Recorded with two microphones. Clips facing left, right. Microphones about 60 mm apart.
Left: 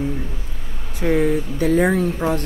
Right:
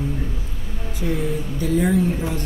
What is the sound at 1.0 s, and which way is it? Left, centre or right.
Speech, left.